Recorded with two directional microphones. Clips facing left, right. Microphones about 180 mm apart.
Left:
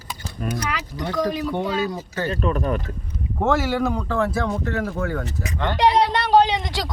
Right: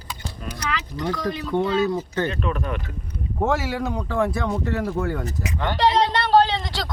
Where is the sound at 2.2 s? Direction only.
40° left (ahead or behind).